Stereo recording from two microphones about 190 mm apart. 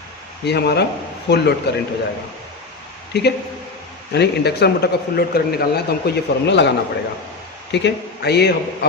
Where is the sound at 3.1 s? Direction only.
60° left (ahead or behind).